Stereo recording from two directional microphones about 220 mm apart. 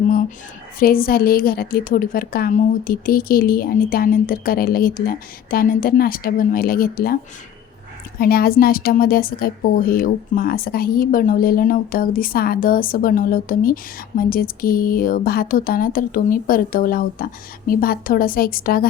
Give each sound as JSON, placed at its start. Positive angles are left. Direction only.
{"t": 0.8, "sound": "a woman's voice", "side_deg": 40}
{"t": 8.2, "sound": "a woman's voice", "side_deg": 45}